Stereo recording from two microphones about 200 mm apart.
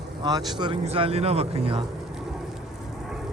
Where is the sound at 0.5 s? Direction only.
25° right (ahead or behind).